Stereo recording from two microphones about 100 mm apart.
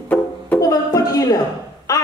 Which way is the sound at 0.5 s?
35° left (ahead or behind).